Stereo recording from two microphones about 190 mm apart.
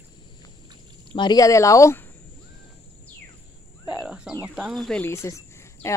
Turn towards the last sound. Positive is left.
turn(degrees=15)  # may be behind; listen again after turning